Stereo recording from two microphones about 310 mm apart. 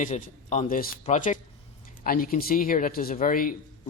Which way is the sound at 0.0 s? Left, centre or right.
Left.